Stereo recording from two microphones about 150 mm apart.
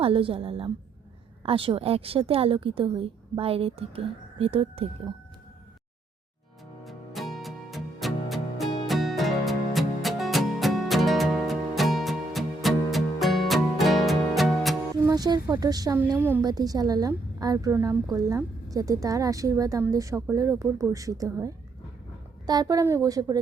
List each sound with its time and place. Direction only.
0.0 s a woman's voice: 35° right (ahead or behind)
6.8 s music: centre (ahead or behind)
14.9 s speech: 25° right (ahead or behind)
16.1 s a woman's voice: 15° right (ahead or behind)
16.4 s a woman's voice: 25° right (ahead or behind)